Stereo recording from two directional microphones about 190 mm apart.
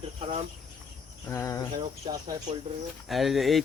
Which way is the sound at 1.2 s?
15° left (ahead or behind).